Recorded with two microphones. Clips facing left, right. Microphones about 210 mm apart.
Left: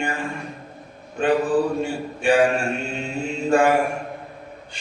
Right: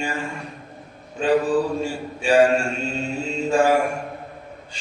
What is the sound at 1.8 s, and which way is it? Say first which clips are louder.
Mantra: left 2 dB; 60° left (ahead or behind).